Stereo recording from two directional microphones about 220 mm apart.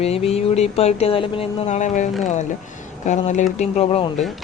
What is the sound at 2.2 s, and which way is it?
Speech, 35° left (ahead or behind).